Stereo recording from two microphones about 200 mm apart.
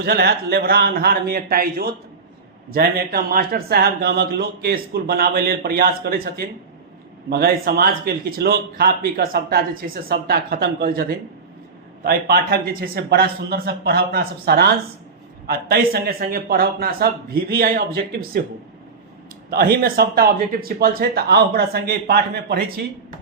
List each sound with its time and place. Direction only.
0.0 s speech: 55° right (ahead or behind)
12.0 s speech: 50° right (ahead or behind)
19.5 s speech: 50° right (ahead or behind)